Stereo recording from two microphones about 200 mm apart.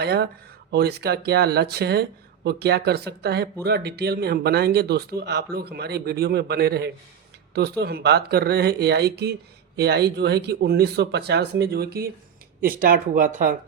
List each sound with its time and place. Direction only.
0.0 s speech: 55° right (ahead or behind)